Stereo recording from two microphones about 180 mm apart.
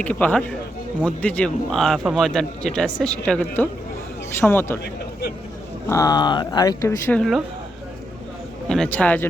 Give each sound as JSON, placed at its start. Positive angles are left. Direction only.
{"t": 0.0, "sound": "a man's voice", "side_deg": 10}
{"t": 5.9, "sound": "speech", "side_deg": 20}
{"t": 8.7, "sound": "a man's voice", "side_deg": 5}